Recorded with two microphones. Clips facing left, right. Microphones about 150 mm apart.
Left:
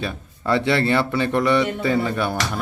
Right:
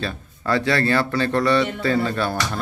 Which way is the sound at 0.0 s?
20° left (ahead or behind).